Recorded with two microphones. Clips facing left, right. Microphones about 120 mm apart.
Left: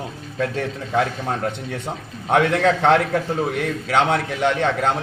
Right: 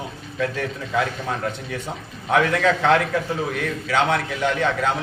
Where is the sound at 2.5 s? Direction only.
50° left (ahead or behind).